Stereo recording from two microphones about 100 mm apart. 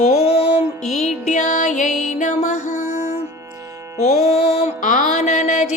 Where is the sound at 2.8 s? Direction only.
90° left.